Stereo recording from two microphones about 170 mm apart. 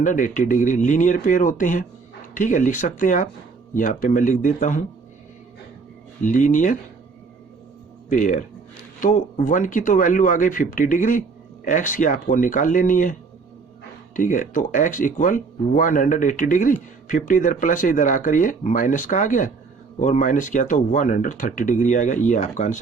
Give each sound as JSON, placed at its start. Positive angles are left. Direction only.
{"t": 0.0, "sound": "speech", "side_deg": 50}
{"t": 6.2, "sound": "speech", "side_deg": 50}
{"t": 8.1, "sound": "speech", "side_deg": 50}
{"t": 14.2, "sound": "speech", "side_deg": 50}